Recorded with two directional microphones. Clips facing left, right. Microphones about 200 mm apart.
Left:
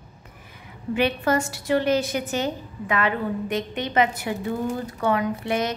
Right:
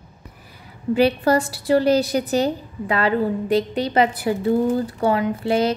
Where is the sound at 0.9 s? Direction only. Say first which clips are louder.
Right 5 dB; 35° right (ahead or behind).